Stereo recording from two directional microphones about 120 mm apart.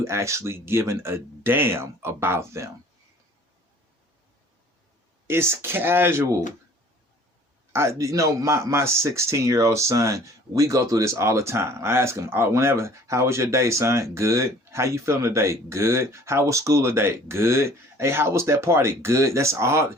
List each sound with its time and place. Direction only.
0.0 s speech: 25° right (ahead or behind)
5.3 s speech: 20° right (ahead or behind)
7.7 s speech: 25° right (ahead or behind)